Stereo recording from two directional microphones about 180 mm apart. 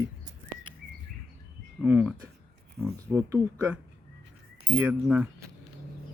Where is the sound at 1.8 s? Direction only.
10° right (ahead or behind).